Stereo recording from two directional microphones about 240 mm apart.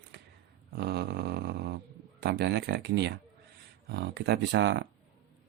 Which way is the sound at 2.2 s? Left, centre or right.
Right.